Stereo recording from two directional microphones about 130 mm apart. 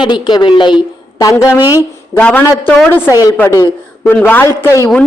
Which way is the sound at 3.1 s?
30° left (ahead or behind).